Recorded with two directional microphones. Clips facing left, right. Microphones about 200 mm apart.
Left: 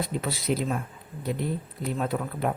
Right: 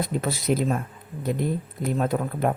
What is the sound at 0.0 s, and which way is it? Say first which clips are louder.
Speech: right 3 dB; 45° right (ahead or behind).